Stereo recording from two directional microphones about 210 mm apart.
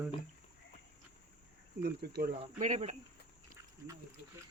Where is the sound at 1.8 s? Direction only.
50° right (ahead or behind).